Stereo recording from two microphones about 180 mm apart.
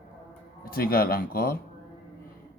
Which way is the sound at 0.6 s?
55° left (ahead or behind).